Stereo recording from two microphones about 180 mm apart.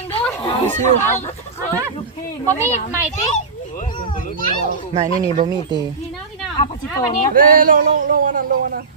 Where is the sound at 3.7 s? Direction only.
50° left (ahead or behind).